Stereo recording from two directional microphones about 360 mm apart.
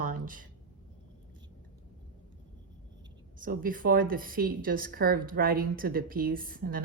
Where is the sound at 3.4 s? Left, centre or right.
Right.